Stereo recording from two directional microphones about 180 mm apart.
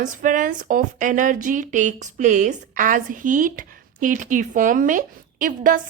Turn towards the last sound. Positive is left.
turn(degrees=-50)  # may be behind; listen again after turning